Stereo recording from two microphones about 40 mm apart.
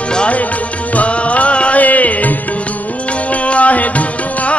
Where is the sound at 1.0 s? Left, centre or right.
Left.